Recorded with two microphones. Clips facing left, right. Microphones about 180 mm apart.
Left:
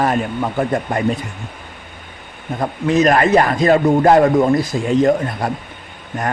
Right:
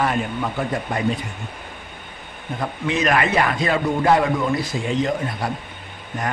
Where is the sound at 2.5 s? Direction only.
40° left (ahead or behind).